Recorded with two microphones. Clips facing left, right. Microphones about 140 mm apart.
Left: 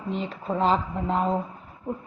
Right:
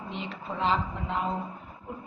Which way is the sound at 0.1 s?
40° left (ahead or behind).